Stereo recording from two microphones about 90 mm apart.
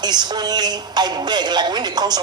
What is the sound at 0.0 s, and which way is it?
A woman's voice, 50° right (ahead or behind).